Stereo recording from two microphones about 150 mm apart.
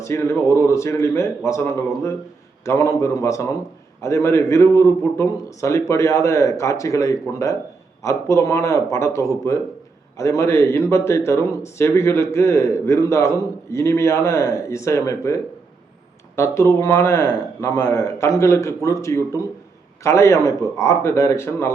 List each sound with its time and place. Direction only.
0.0 s speech: 20° left (ahead or behind)